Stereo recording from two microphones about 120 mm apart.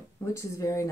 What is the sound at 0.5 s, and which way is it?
Speech, 25° left (ahead or behind).